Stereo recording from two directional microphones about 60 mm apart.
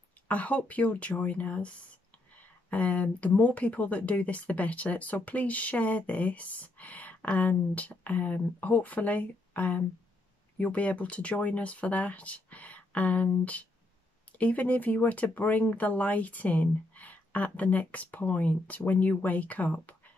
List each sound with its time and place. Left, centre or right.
0.3 s speech: left
2.7 s speech: left